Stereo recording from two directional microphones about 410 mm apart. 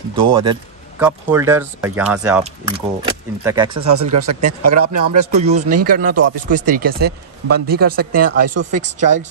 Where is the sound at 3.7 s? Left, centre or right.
Right.